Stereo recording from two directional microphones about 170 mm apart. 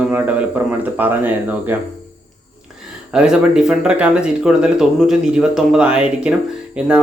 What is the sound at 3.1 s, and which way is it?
Speech, 5° right (ahead or behind).